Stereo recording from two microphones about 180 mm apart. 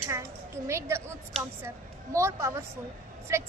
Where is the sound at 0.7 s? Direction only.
15° right (ahead or behind).